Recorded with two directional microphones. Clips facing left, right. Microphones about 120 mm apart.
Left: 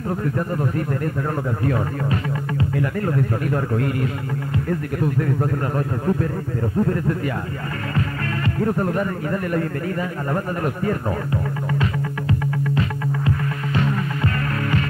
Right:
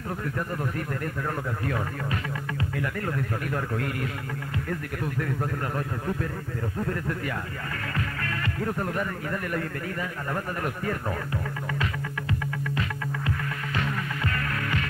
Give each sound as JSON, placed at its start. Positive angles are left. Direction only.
{"t": 0.2, "sound": "a man's voice", "side_deg": 30}
{"t": 2.8, "sound": "a man's voice", "side_deg": 30}
{"t": 8.5, "sound": "a man's voice", "side_deg": 35}
{"t": 11.8, "sound": "music", "side_deg": 30}